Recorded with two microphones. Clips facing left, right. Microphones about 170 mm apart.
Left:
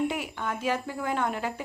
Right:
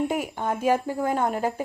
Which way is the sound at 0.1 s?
45° right (ahead or behind).